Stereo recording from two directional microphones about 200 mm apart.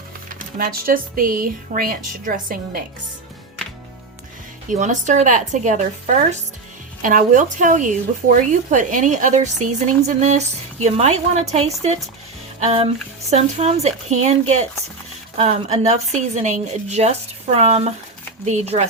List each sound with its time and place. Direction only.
0.3 s speech: 45° right (ahead or behind)
4.7 s a woman's voice: 40° right (ahead or behind)